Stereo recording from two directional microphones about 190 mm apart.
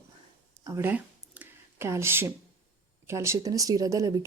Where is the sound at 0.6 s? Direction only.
15° right (ahead or behind).